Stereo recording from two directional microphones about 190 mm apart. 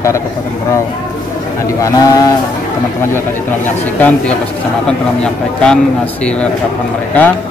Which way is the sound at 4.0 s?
5° left (ahead or behind).